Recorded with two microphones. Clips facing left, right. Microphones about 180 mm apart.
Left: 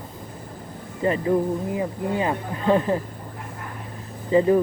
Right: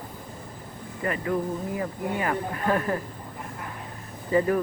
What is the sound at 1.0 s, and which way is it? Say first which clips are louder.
Speech: left 6 dB; 25° left (ahead or behind).